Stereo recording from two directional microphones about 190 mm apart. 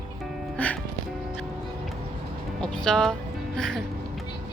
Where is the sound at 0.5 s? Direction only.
5° left (ahead or behind).